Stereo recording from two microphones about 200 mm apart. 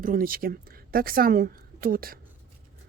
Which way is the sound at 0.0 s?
45° right (ahead or behind).